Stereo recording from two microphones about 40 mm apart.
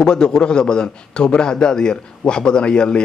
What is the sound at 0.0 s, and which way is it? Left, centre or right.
A man's voice, centre.